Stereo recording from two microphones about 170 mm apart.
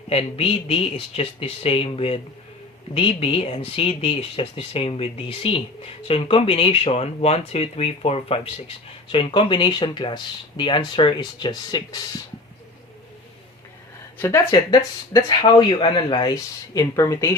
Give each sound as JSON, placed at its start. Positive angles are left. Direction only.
{"t": 0.1, "sound": "speech", "side_deg": 35}
{"t": 14.2, "sound": "speech", "side_deg": 15}